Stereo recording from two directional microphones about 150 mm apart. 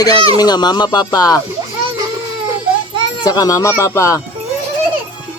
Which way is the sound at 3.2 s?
25° left (ahead or behind).